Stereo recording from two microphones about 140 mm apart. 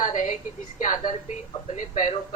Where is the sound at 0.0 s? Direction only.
65° left (ahead or behind).